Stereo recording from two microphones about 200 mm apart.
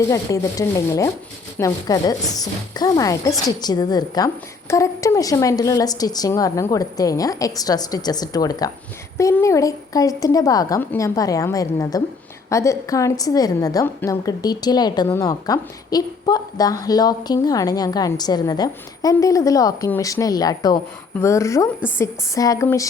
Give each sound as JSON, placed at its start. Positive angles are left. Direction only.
{"t": 0.1, "sound": "a woman's voice", "side_deg": 15}